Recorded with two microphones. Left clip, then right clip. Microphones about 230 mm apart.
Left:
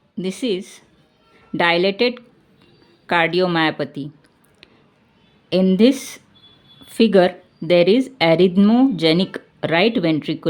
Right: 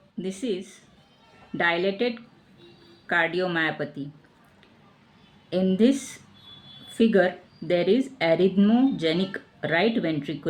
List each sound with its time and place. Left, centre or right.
0.2 s speech: left
5.5 s speech: left